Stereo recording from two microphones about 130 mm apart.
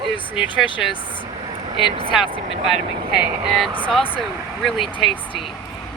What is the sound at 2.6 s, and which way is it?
Speech, centre (ahead or behind).